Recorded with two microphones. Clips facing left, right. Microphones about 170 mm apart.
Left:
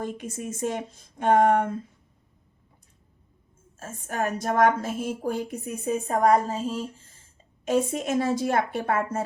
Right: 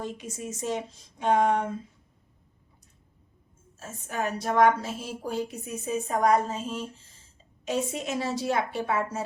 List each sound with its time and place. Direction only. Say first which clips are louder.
0.0 s a woman's voice: left 3 dB; 55° left (ahead or behind)
3.8 s a woman's voice: left 3 dB; 50° left (ahead or behind)
7.6 s a woman's voice: left 5 dB; 50° left (ahead or behind)